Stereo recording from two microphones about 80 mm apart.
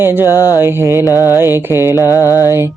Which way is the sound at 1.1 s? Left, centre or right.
Left.